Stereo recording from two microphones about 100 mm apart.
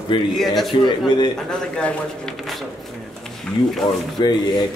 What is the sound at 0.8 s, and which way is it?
Speech, 50° left (ahead or behind).